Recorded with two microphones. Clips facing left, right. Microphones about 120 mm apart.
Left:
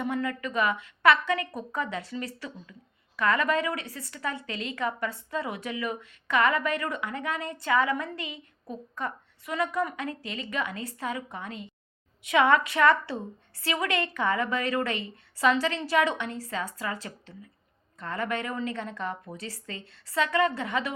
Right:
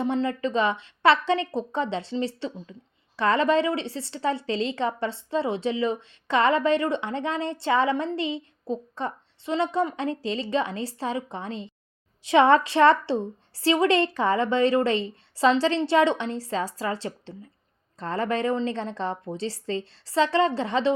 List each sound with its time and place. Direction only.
0.0 s a woman's voice: 30° right (ahead or behind)